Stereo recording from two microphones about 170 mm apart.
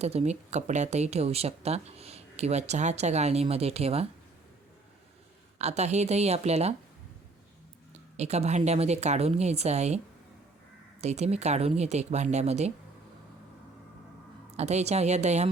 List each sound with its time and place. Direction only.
0.0 s speech: 40° right (ahead or behind)
5.5 s speech: 40° right (ahead or behind)
8.1 s speech: 40° right (ahead or behind)
11.0 s speech: 40° right (ahead or behind)
14.5 s speech: 40° right (ahead or behind)